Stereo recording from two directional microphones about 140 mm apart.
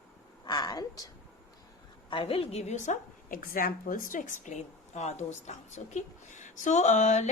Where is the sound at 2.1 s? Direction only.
40° left (ahead or behind).